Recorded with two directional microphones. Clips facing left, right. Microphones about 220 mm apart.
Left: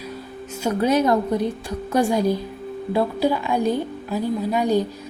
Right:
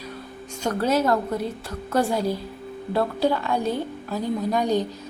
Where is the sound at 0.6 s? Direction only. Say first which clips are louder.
Left 3 dB; 10° left (ahead or behind).